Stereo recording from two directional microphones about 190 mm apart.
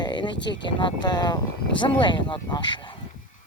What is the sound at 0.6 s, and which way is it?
Speech, 25° left (ahead or behind).